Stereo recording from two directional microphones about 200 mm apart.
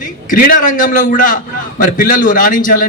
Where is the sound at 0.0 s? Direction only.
45° left (ahead or behind).